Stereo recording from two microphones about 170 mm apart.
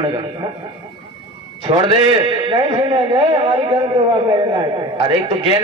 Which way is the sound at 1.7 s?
25° right (ahead or behind).